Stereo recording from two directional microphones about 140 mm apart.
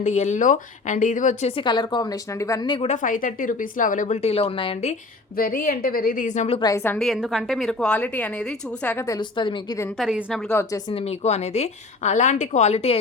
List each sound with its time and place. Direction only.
0.0 s speech: 60° left (ahead or behind)
1.5 s a woman's voice: 35° left (ahead or behind)
2.8 s speech: 65° left (ahead or behind); by 4.9 s 45° left (ahead or behind)
5.4 s a woman's voice: 90° left; by 6.6 s 55° left (ahead or behind)
6.6 s a woman's voice: 25° left (ahead or behind)
6.8 s a woman's voice: 10° left (ahead or behind)
7.1 s a woman's voice: centre (ahead or behind)
9.0 s a woman's voice: 30° left (ahead or behind)
10.0 s a woman's voice: 5° right (ahead or behind)
10.5 s a woman's voice: 20° left (ahead or behind)
10.9 s a woman's voice: 50° left (ahead or behind)